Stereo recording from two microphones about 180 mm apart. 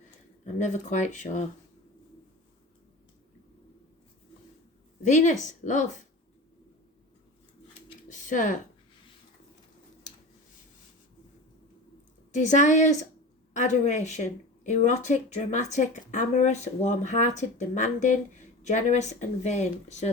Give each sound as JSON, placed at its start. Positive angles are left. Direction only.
{"t": 0.6, "sound": "speech", "side_deg": 40}
{"t": 5.0, "sound": "speech", "side_deg": 45}
{"t": 8.1, "sound": "a sound", "side_deg": 45}
{"t": 12.3, "sound": "speech", "side_deg": 40}